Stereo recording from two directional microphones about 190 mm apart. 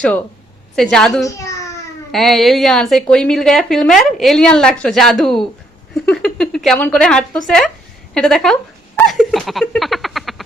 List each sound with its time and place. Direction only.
0.8 s a woman's voice: centre (ahead or behind)
1.2 s a sound: 15° left (ahead or behind)
2.1 s a woman's voice: centre (ahead or behind)
9.0 s frog: centre (ahead or behind)